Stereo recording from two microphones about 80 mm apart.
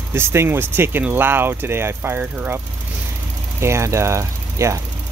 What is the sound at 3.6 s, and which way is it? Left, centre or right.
Speech, right.